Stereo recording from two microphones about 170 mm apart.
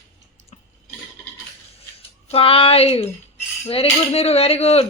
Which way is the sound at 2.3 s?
35° left (ahead or behind).